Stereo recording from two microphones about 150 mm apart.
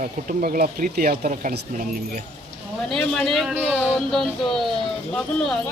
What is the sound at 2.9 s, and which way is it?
Speech, 5° left (ahead or behind).